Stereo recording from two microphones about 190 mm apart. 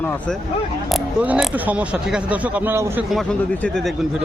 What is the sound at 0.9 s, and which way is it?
Speech, 5° right (ahead or behind).